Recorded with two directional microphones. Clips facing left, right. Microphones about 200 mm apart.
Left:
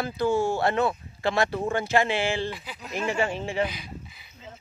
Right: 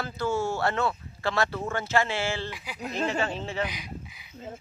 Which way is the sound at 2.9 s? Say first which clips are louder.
Left 2 dB; 10° left (ahead or behind).